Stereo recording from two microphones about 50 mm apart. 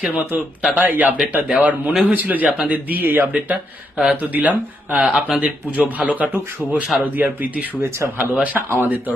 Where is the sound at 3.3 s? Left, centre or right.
Right.